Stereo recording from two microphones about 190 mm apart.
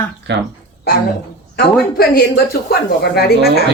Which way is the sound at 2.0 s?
55° left (ahead or behind).